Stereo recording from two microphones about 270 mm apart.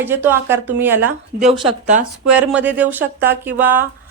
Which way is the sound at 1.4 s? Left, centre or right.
Right.